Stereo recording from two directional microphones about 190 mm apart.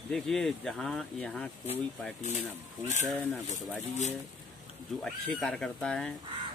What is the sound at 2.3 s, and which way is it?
Speech, 40° left (ahead or behind).